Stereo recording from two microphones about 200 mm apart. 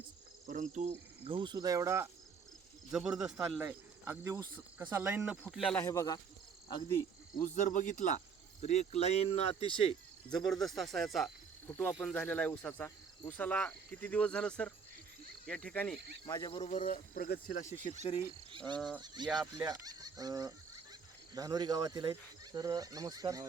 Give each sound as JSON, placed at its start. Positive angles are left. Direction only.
{"t": 0.4, "sound": "speech", "side_deg": -40}
{"t": 2.9, "sound": "speech", "side_deg": -5}
{"t": 5.4, "sound": "speech", "side_deg": 0}
{"t": 5.8, "sound": "speech", "side_deg": 15}
{"t": 7.3, "sound": "speech", "side_deg": 40}
{"t": 10.2, "sound": "speech", "side_deg": 0}
{"t": 16.2, "sound": "cricket", "side_deg": 20}
{"t": 16.6, "sound": "speech", "side_deg": 35}
{"t": 18.8, "sound": "speech", "side_deg": 0}
{"t": 19.0, "sound": "speech", "side_deg": -20}